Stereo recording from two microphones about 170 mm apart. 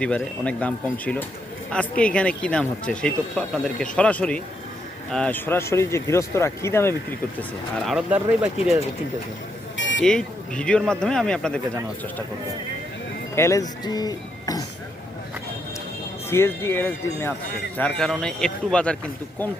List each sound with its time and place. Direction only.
0.0 s speech: 5° left (ahead or behind)
7.9 s speech: 5° right (ahead or behind)
9.7 s a sound: 90° left
10.0 s speech: 5° left (ahead or behind)
13.3 s speech: 15° left (ahead or behind)
16.3 s speech: 15° left (ahead or behind)